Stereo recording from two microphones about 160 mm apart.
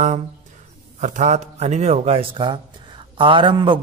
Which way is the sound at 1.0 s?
50° right (ahead or behind).